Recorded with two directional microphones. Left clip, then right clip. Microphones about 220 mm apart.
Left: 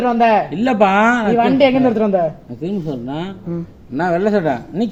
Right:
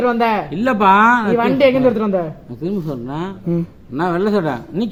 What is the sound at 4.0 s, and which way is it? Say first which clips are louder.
Speech: left 1 dB; 15° right (ahead or behind).